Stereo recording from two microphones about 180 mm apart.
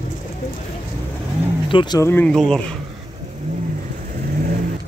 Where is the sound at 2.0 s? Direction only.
10° left (ahead or behind).